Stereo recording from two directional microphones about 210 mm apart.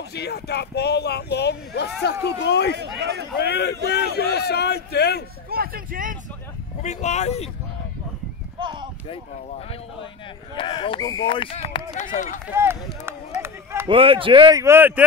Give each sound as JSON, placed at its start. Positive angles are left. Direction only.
{"t": 0.1, "sound": "speech", "side_deg": 50}
{"t": 3.0, "sound": "speech", "side_deg": -55}
{"t": 3.3, "sound": "speech", "side_deg": 50}
{"t": 5.5, "sound": "speech", "side_deg": -45}
{"t": 6.8, "sound": "speech", "side_deg": 35}
{"t": 8.5, "sound": "clip-clop", "side_deg": -20}
{"t": 10.5, "sound": "speech", "side_deg": 25}
{"t": 11.9, "sound": "speech", "side_deg": 35}
{"t": 12.4, "sound": "speech", "side_deg": -10}
{"t": 13.4, "sound": "a sound", "side_deg": -10}
{"t": 13.8, "sound": "speech", "side_deg": -25}